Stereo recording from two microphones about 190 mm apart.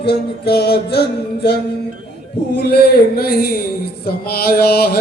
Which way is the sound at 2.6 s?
55° left (ahead or behind).